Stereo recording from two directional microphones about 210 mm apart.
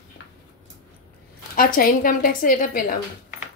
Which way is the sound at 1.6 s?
40° left (ahead or behind).